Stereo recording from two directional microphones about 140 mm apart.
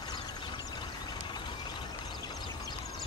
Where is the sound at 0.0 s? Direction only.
30° left (ahead or behind).